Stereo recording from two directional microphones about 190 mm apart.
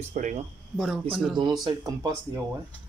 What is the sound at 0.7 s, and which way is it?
Speech, centre (ahead or behind).